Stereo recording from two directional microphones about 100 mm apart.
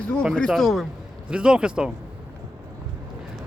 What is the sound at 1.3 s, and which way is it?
Speech, 10° right (ahead or behind).